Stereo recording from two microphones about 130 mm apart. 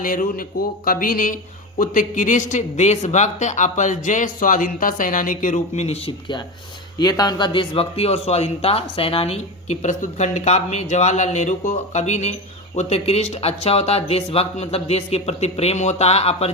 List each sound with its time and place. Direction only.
0.0 s a man's voice: 90° left; by 6.0 s 60° left (ahead or behind)
6.1 s speech: 40° left (ahead or behind)